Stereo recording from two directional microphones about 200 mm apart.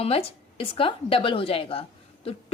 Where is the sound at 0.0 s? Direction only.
30° left (ahead or behind).